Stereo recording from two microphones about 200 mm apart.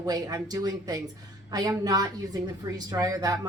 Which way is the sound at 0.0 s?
15° right (ahead or behind).